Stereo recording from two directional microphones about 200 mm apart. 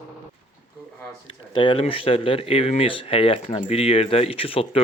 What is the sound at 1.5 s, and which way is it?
Speech, 25° left (ahead or behind).